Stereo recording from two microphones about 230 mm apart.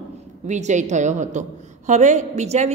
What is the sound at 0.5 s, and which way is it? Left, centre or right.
A woman's voice, right.